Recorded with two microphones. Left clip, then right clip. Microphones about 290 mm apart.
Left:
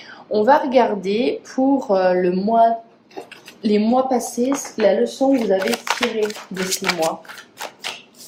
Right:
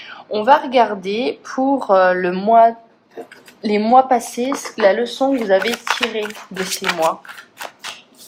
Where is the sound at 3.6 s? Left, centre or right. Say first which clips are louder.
Right 5 dB; centre.